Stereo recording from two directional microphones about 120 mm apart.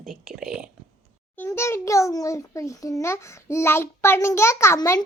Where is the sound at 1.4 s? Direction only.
20° left (ahead or behind).